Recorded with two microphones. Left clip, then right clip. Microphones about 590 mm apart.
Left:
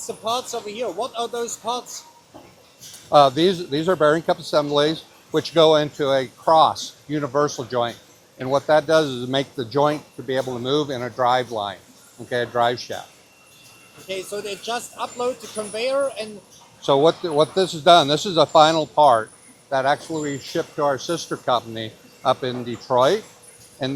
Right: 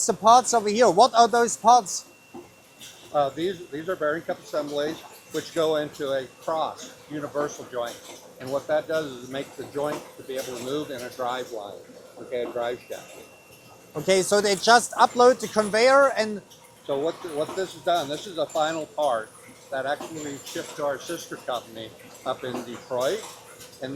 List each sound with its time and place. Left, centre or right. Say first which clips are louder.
0.0 s speech: right 8 dB; right
3.1 s a man's voice: left 10 dB; left
10.3 s a man's voice: left 8 dB; left
14.1 s speech: right 8 dB; right
16.8 s a man's voice: left 10 dB; left